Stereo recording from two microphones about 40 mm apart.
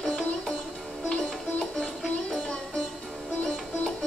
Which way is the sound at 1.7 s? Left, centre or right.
Left.